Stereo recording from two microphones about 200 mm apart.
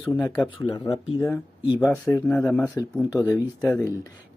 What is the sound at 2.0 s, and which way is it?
Speech, 10° left (ahead or behind).